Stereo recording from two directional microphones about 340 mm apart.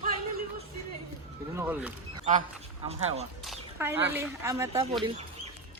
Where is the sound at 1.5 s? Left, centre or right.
Centre.